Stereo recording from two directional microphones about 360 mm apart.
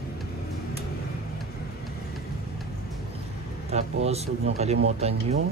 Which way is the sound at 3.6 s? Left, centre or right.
Centre.